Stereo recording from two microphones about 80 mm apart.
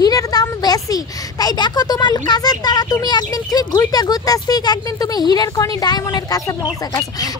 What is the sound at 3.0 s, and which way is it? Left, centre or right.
Speech, left.